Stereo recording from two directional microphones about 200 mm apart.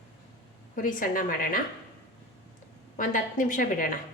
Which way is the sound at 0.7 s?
45° left (ahead or behind).